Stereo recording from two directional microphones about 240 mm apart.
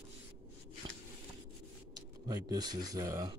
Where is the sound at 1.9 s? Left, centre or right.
Centre.